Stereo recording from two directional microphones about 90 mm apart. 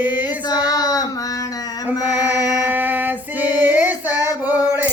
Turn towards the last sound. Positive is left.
turn(degrees=-20)  # may be behind; listen again after turning